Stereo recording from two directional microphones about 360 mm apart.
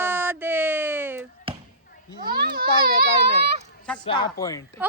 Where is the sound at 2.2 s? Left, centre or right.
Right.